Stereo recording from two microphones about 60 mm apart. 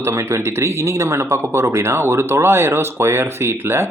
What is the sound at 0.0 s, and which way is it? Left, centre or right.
Speech, right.